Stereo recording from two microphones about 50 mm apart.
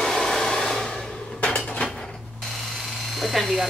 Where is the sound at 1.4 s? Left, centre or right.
Centre.